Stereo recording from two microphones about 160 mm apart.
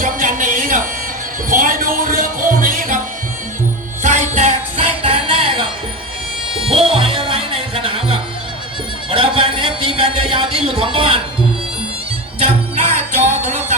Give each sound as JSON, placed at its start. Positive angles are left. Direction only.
{"t": 0.0, "sound": "a sound", "side_deg": -55}
{"t": 1.5, "sound": "music", "side_deg": -55}
{"t": 4.0, "sound": "music", "side_deg": -50}
{"t": 6.7, "sound": "music", "side_deg": -35}
{"t": 9.0, "sound": "a sound", "side_deg": -35}
{"t": 12.4, "sound": "music", "side_deg": -45}